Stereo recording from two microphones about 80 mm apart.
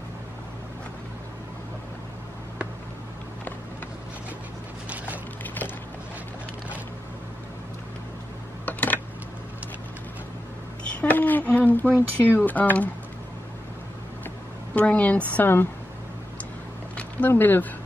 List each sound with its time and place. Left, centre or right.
4.8 s a sound: centre
5.4 s music: left
8.6 s typing: left
11.0 s a sound: left
14.7 s a woman's voice: centre
17.3 s a woman's voice: left